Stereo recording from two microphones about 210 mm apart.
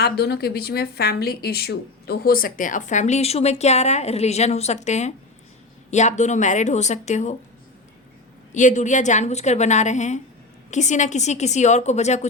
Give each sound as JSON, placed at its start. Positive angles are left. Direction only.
{"t": 0.0, "sound": "a woman's voice", "side_deg": 50}
{"t": 8.5, "sound": "a woman's voice", "side_deg": 35}